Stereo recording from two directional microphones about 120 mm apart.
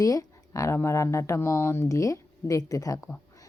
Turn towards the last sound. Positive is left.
turn(degrees=30)  # may be behind; listen again after turning